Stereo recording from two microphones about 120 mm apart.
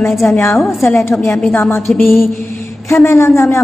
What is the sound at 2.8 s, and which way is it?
Speech, 25° left (ahead or behind).